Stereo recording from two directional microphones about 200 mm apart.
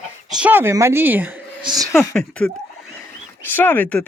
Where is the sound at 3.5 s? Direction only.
10° left (ahead or behind).